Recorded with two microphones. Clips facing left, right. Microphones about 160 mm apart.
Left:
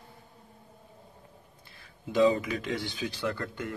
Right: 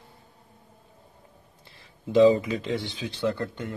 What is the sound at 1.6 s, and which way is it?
A man's voice, 30° right (ahead or behind).